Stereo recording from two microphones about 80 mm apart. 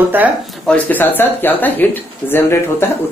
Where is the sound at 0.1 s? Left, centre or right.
Right.